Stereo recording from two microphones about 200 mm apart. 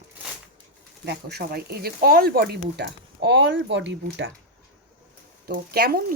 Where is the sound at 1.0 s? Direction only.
55° right (ahead or behind).